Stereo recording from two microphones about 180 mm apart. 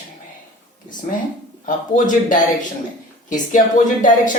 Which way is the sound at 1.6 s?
45° left (ahead or behind).